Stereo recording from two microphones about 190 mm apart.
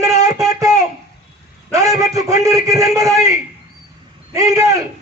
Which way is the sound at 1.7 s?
20° right (ahead or behind).